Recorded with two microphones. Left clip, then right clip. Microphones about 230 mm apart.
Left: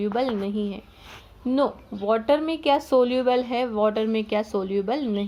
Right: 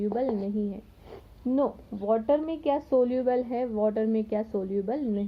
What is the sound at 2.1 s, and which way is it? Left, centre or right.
A woman's voice, left.